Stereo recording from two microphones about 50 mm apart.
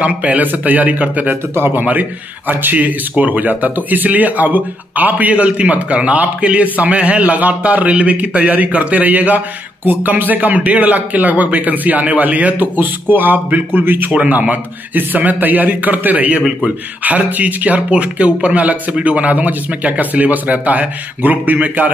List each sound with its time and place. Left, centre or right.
0.0 s speech: right
1.3 s speech: right
1.8 s speech: right
14.1 s speech: right